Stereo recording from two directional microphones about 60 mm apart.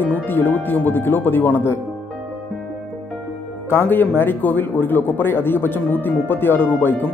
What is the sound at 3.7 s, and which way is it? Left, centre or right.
Speech, left.